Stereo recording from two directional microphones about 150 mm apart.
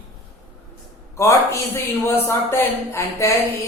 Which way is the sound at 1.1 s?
20° left (ahead or behind).